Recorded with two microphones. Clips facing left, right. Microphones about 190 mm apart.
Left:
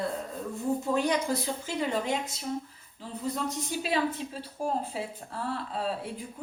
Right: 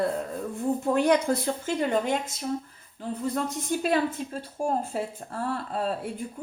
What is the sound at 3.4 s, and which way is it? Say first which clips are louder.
A woman's voice: right 5 dB; 50° right (ahead or behind).